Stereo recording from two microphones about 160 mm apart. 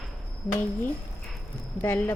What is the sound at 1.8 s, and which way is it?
Speech, 15° left (ahead or behind).